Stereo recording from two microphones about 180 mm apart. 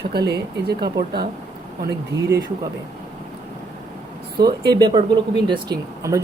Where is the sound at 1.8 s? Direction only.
65° right (ahead or behind).